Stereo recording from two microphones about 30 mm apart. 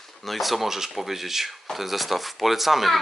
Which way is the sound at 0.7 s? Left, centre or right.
Centre.